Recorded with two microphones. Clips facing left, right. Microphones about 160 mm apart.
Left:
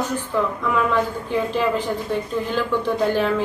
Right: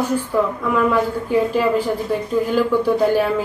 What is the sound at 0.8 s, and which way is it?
A woman's voice, 10° right (ahead or behind).